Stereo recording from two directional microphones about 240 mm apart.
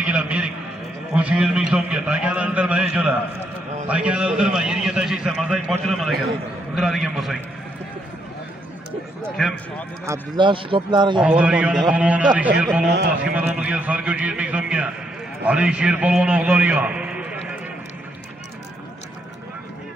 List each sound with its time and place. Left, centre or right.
0.0 s a sound: centre
1.1 s a man's voice: centre
9.2 s a man's voice: centre
10.3 s speech: right
11.1 s a man's voice: centre